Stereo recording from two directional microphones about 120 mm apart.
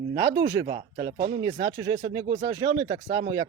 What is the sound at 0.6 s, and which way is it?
Speech, 45° right (ahead or behind).